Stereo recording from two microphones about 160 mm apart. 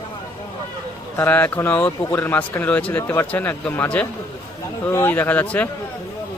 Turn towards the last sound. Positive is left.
turn(degrees=10)  # may be behind; listen again after turning